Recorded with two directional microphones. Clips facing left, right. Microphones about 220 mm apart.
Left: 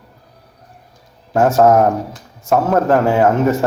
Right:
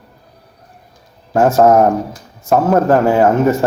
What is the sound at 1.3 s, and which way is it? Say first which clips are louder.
Speech: right 1 dB; centre (ahead or behind).